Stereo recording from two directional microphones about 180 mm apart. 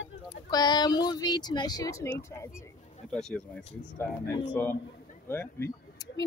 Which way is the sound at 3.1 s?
5° left (ahead or behind).